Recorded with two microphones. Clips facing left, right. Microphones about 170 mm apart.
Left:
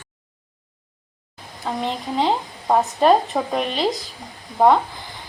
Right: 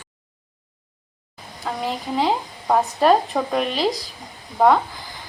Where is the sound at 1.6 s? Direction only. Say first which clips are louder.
Left 1 dB; 5° right (ahead or behind).